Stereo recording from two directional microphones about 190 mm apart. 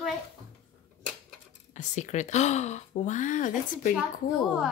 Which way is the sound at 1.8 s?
40° left (ahead or behind).